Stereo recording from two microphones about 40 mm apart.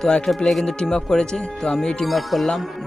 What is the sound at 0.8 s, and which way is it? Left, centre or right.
Speech, left.